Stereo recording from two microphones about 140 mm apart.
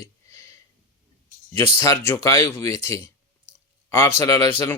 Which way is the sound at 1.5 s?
20° left (ahead or behind).